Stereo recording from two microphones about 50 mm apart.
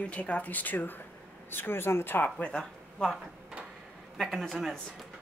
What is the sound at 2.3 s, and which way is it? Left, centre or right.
Speech, left.